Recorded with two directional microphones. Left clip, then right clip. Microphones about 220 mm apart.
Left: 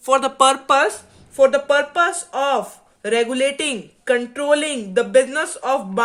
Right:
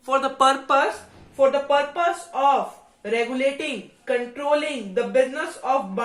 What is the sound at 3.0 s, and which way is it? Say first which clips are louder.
Speech: left 5 dB; 45° left (ahead or behind).